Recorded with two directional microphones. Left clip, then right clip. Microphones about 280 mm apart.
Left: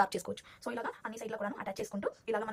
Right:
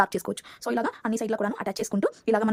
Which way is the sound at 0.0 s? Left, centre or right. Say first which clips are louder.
Right 7 dB; centre.